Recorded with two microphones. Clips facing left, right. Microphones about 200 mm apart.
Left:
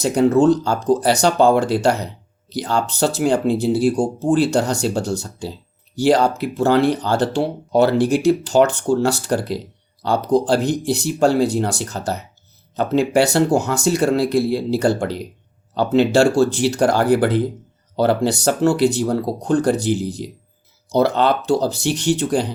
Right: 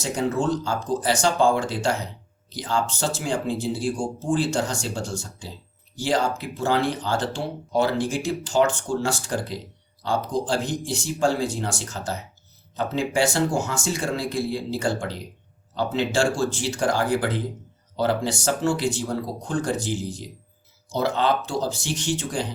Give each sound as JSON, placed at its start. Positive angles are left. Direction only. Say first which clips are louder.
{"t": 0.0, "sound": "speech", "louder": "left 10 dB", "side_deg": 65}